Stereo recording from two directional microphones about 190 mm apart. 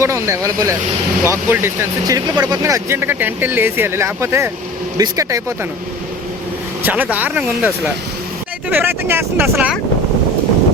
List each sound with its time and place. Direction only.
0.0 s speech: 15° right (ahead or behind)
6.8 s speech: 10° right (ahead or behind)
8.7 s speech: 10° right (ahead or behind)